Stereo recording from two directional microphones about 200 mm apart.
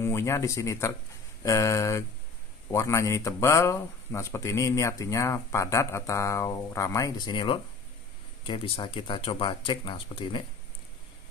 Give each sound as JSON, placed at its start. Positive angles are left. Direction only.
{"t": 0.0, "sound": "speech", "side_deg": 15}